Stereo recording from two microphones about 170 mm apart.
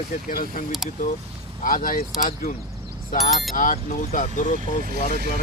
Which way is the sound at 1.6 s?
55° left (ahead or behind).